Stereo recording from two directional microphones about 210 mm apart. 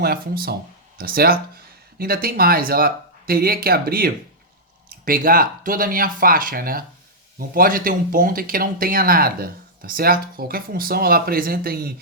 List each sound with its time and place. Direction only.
0.0 s speech: 45° right (ahead or behind)